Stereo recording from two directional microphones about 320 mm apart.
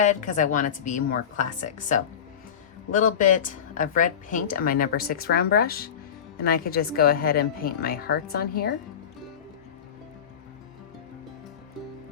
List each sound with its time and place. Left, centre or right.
0.0 s speech: left